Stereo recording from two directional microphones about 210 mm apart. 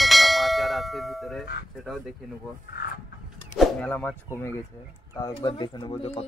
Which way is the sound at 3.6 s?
5° left (ahead or behind).